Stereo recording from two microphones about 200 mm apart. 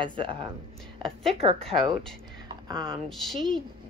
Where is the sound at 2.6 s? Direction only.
20° right (ahead or behind).